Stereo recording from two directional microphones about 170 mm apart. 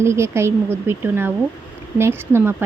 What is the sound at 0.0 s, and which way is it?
A woman's voice, 15° right (ahead or behind).